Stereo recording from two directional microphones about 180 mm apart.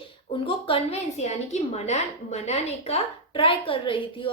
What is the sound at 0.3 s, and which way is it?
A woman's voice, 30° left (ahead or behind).